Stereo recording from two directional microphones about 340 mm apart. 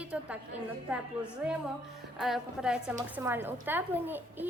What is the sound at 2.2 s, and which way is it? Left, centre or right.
A woman's voice, centre.